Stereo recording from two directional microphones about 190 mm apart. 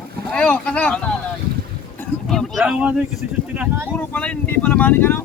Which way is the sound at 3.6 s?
10° right (ahead or behind).